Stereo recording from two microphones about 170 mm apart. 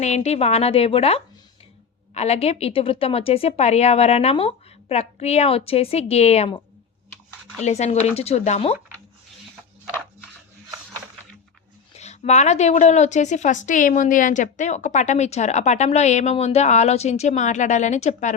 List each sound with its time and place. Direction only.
0.0 s a woman's voice: 40° left (ahead or behind)
7.6 s a woman's voice: 40° left (ahead or behind)
11.9 s a woman's voice: 40° left (ahead or behind)